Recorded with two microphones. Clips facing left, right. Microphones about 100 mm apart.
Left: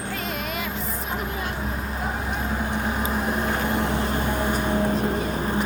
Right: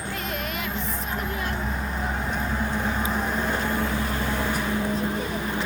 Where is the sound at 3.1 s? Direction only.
10° left (ahead or behind).